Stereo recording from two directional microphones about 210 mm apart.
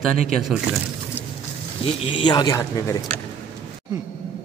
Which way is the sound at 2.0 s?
25° left (ahead or behind).